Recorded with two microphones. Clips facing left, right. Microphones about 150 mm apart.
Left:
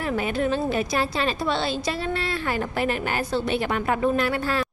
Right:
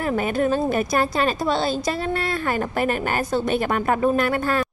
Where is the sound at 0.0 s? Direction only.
45° right (ahead or behind).